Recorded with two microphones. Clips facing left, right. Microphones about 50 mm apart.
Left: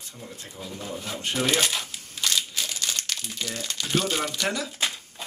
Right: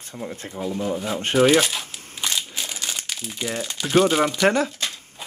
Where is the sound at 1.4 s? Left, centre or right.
Centre.